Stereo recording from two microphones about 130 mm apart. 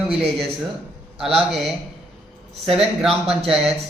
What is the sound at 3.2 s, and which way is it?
Speech, 50° right (ahead or behind).